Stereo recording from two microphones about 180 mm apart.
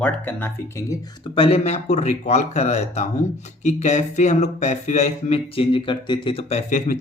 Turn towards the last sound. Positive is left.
turn(degrees=40)  # may be behind; listen again after turning